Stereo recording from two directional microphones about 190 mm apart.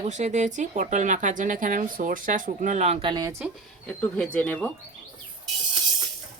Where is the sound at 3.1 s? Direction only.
15° right (ahead or behind).